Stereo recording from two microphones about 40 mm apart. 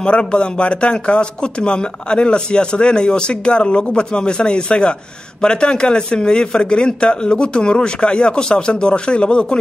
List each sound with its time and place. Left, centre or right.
0.0 s a man's voice: left